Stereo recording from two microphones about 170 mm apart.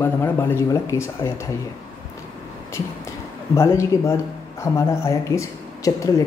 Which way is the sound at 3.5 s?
15° left (ahead or behind).